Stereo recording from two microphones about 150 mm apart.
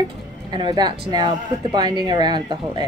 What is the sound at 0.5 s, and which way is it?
A woman's voice, 30° right (ahead or behind).